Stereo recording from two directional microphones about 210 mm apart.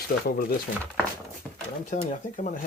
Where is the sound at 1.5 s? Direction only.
Centre (ahead or behind).